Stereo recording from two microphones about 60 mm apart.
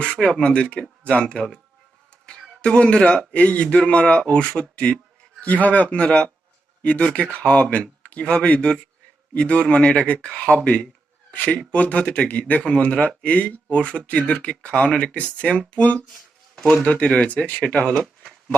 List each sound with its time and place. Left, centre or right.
0.0 s speech: centre
12.6 s speech: centre